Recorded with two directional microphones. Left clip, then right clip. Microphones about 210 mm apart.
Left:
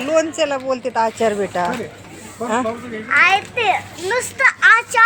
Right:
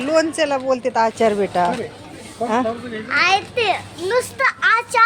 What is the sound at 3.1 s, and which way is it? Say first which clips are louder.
A child's voice: left 3 dB; 30° right (ahead or behind).